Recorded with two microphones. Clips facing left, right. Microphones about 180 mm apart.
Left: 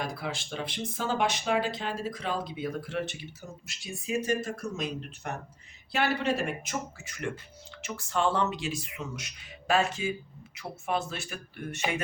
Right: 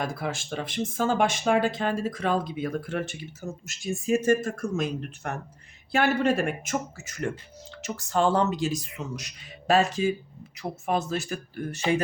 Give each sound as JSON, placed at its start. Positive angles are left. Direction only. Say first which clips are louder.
{"t": 0.0, "sound": "speech", "louder": "right 4 dB", "side_deg": -50}